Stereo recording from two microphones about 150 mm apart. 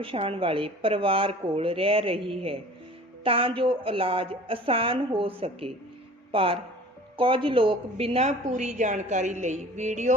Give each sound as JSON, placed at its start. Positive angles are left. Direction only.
{"t": 0.0, "sound": "a woman's voice", "side_deg": -35}